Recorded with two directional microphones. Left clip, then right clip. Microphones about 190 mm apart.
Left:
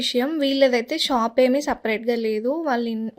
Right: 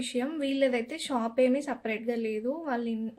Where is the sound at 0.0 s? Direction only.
50° left (ahead or behind).